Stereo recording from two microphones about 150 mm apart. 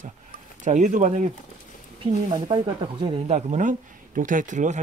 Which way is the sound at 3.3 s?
55° right (ahead or behind).